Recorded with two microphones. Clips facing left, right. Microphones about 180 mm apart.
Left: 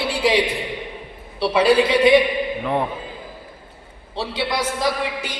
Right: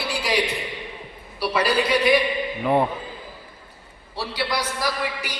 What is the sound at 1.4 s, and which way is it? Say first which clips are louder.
Speech: left 4 dB; 25° left (ahead or behind).